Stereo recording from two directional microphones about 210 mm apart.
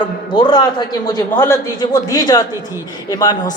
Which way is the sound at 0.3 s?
20° left (ahead or behind).